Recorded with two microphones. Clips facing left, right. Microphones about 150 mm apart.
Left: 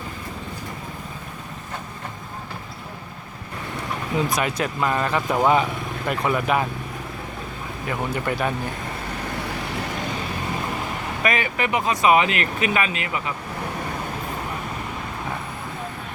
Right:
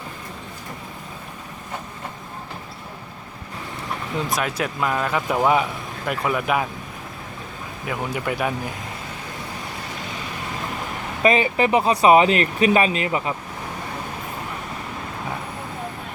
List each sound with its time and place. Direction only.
4.3 s speech: centre (ahead or behind)
7.9 s speech: 5° right (ahead or behind)
11.2 s speech: 30° right (ahead or behind)